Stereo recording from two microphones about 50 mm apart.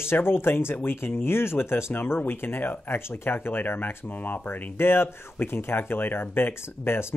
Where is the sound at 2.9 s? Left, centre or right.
Left.